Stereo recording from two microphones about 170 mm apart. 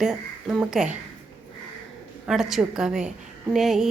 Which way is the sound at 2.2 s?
5° right (ahead or behind).